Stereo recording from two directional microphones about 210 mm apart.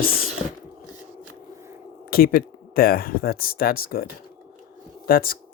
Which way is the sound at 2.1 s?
45° left (ahead or behind).